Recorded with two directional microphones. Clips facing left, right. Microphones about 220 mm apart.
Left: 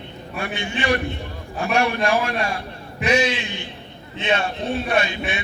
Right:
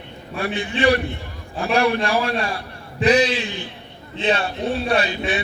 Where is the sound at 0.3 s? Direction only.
35° right (ahead or behind).